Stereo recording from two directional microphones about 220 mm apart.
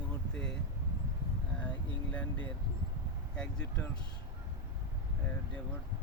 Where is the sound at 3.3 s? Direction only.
5° left (ahead or behind).